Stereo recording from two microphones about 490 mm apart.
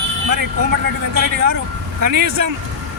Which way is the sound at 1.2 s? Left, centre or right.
Right.